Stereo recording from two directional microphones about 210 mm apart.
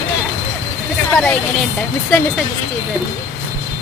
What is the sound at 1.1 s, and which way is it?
Speech, 5° left (ahead or behind).